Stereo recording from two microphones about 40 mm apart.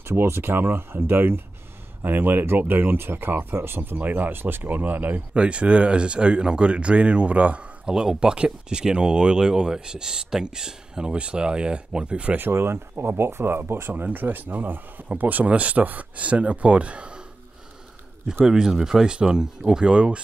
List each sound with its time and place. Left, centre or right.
0.0 s speech: right
2.0 s speech: right
4.0 s speech: right
4.6 s speech: right
5.3 s speech: right
7.9 s speech: centre
11.1 s speech: right
12.4 s speech: right
14.0 s speech: right
18.4 s speech: centre